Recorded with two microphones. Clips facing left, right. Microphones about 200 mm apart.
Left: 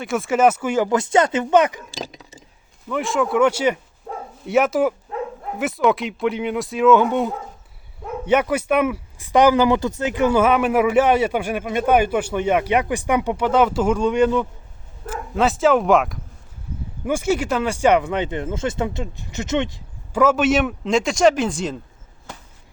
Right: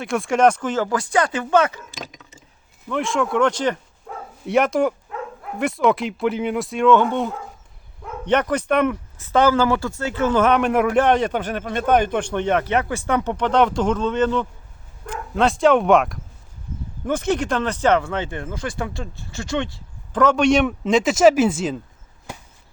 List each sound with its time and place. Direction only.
0.0 s a man's voice: centre (ahead or behind)
1.9 s speech: 30° left (ahead or behind)
2.9 s speech: centre (ahead or behind)
4.1 s bow-wow: 30° left (ahead or behind)
4.4 s a man's voice: centre (ahead or behind); by 19.8 s 20° left (ahead or behind)
20.1 s speech: 5° left (ahead or behind)